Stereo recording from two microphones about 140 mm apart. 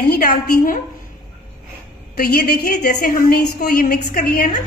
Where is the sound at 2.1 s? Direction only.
90° left.